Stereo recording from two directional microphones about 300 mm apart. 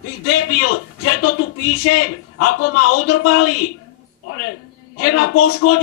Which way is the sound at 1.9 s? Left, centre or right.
Left.